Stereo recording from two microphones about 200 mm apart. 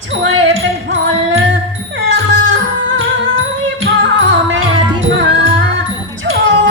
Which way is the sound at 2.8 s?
75° right (ahead or behind).